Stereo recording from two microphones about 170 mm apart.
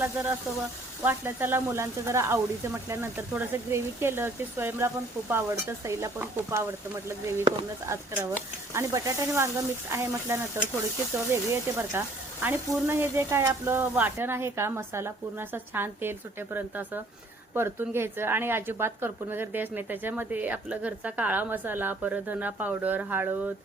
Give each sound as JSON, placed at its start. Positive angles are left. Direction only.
{"t": 0.0, "sound": "speech", "side_deg": -15}
{"t": 11.5, "sound": "speech", "side_deg": -15}